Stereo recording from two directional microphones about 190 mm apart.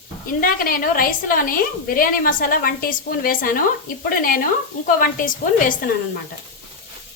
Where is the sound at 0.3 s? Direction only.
50° left (ahead or behind).